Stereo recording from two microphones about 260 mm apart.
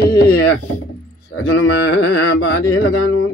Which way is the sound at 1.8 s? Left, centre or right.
Left.